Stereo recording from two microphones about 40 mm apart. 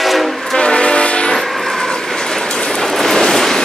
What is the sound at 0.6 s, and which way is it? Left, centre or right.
Train, left.